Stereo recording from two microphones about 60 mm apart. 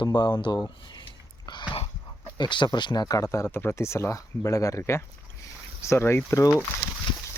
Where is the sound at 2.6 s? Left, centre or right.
Left.